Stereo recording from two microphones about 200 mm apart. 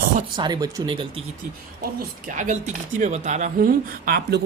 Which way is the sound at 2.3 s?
40° right (ahead or behind).